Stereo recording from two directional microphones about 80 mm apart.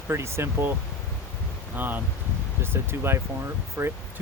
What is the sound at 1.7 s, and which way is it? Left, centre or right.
Speech, right.